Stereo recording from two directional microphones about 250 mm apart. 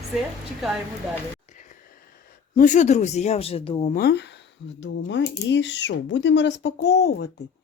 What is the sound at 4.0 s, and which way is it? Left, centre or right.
Speech, left.